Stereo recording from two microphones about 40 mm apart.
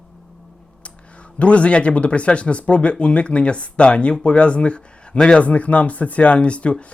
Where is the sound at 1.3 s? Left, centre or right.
Left.